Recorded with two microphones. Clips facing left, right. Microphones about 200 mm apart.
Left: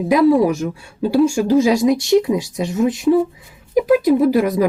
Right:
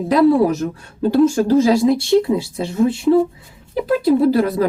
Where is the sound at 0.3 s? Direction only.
15° left (ahead or behind).